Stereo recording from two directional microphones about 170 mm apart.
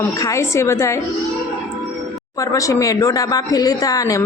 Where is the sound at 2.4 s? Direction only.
20° left (ahead or behind).